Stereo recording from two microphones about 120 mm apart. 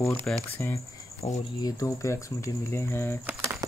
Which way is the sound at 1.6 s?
30° left (ahead or behind).